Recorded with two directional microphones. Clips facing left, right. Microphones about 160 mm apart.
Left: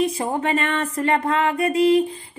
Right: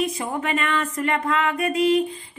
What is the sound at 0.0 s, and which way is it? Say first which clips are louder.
Music: left 4 dB; 30° left (ahead or behind).